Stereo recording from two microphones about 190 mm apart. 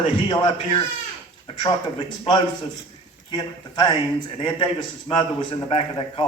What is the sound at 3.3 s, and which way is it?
A man's voice, 25° left (ahead or behind).